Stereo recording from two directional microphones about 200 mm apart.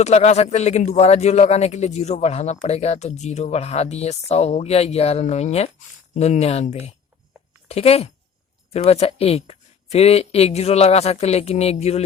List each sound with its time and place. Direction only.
0.0 s a man's voice: 35° left (ahead or behind)